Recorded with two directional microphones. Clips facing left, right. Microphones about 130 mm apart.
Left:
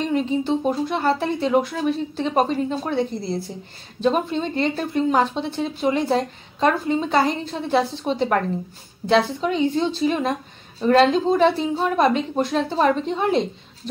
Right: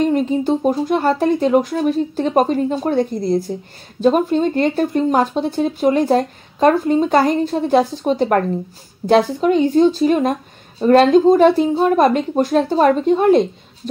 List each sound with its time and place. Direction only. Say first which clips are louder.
0.0 s speech: right 5 dB; 45° right (ahead or behind)